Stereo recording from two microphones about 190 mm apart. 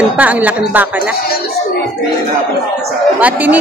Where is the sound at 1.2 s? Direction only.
55° left (ahead or behind).